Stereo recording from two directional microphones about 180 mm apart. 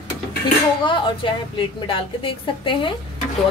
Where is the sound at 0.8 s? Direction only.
25° left (ahead or behind).